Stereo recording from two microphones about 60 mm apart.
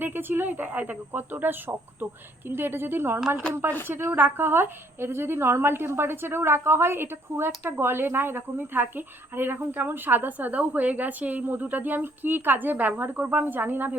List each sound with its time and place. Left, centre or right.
0.0 s a woman's voice: right
3.2 s speech: centre
3.5 s a woman's voice: right